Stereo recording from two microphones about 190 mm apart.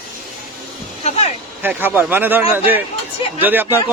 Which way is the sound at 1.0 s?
35° left (ahead or behind).